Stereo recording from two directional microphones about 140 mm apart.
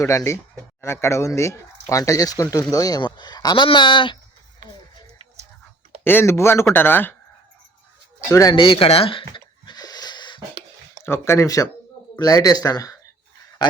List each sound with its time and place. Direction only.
0.0 s speech: 20° left (ahead or behind)
6.1 s speech: 15° left (ahead or behind)
8.3 s speech: 25° left (ahead or behind)
8.5 s a sound: 40° left (ahead or behind)
11.0 s speech: 15° left (ahead or behind)